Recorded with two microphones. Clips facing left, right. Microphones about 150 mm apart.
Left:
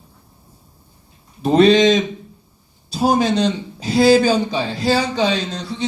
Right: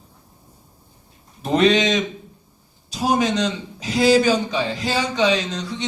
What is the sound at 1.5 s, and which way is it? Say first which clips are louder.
A man's voice: left 5 dB; 35° left (ahead or behind).